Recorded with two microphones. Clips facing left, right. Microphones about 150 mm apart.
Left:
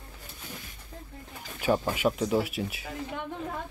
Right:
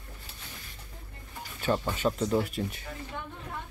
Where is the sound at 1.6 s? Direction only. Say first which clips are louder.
Left 3 dB; 10° left (ahead or behind).